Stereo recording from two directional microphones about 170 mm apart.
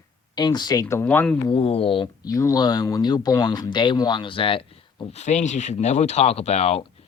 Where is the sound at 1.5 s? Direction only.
35° left (ahead or behind).